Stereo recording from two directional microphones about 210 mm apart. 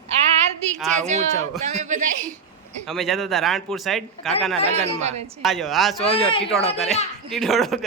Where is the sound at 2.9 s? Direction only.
Centre (ahead or behind).